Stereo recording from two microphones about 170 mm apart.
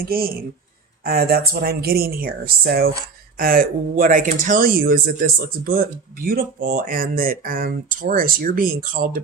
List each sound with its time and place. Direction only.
0.0 s speech: 60° right (ahead or behind)